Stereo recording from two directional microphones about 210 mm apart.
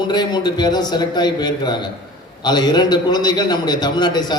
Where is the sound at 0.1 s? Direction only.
20° left (ahead or behind).